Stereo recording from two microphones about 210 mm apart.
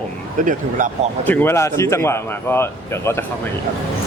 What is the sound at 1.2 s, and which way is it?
Speech, 10° left (ahead or behind).